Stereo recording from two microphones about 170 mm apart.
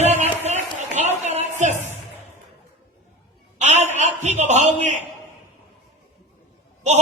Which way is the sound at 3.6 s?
40° right (ahead or behind).